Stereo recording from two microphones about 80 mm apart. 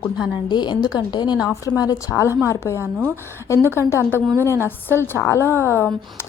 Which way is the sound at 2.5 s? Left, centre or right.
Left.